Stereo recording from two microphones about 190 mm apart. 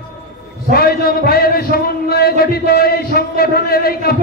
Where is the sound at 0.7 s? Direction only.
50° left (ahead or behind).